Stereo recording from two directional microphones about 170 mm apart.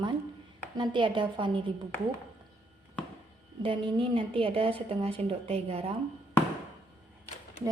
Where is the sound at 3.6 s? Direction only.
30° right (ahead or behind).